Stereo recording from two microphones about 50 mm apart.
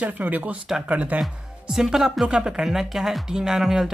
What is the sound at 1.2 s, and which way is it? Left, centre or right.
Speech, centre.